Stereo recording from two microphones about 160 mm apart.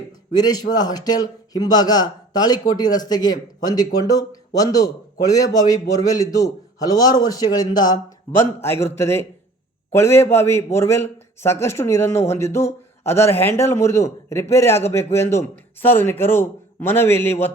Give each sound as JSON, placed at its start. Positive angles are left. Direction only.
{"t": 0.3, "sound": "a man's voice", "side_deg": 25}